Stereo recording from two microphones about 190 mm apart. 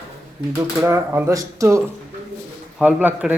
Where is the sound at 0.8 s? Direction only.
15° right (ahead or behind).